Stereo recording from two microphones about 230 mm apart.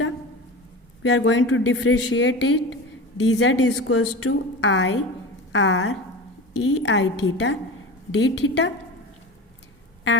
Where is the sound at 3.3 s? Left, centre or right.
Left.